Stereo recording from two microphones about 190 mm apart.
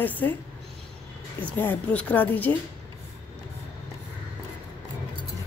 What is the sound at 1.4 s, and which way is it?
A woman's voice, 10° left (ahead or behind).